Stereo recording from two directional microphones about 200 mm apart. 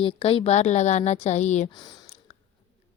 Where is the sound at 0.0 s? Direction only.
30° left (ahead or behind).